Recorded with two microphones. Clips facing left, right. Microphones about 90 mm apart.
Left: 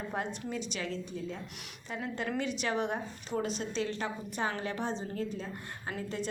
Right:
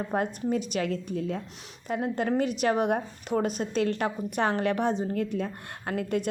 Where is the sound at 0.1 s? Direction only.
50° right (ahead or behind).